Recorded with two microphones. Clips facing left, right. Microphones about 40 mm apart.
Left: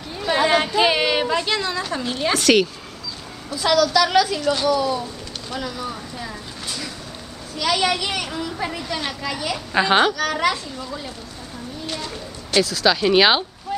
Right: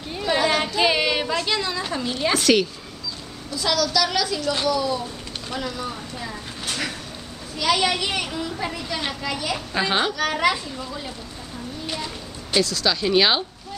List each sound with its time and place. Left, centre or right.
0.4 s a sound: centre
1.8 s a woman's voice: centre
5.5 s speech: centre
6.6 s a sound: right
7.5 s speech: centre
9.8 s a woman's voice: centre
10.1 s a child's voice: centre
11.8 s a sound: centre
12.5 s a woman's voice: centre